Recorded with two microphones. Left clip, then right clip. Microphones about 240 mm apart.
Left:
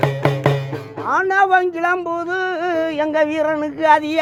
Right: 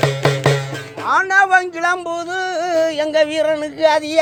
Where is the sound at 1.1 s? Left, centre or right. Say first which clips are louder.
Right 2 dB; right.